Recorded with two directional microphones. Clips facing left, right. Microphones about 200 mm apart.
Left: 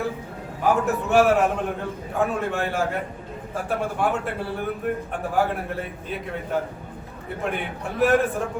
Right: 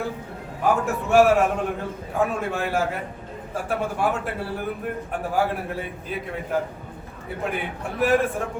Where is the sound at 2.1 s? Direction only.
Centre (ahead or behind).